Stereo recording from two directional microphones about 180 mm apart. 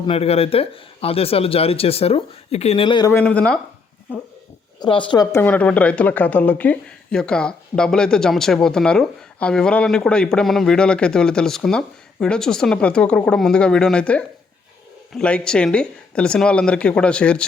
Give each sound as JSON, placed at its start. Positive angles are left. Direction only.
{"t": 0.0, "sound": "speech", "side_deg": 30}
{"t": 3.1, "sound": "speech", "side_deg": 10}
{"t": 4.8, "sound": "a woman's voice", "side_deg": 25}